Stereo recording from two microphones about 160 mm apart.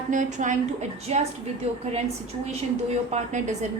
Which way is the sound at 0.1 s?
50° right (ahead or behind).